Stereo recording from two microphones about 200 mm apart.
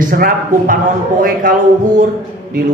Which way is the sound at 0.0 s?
45° right (ahead or behind).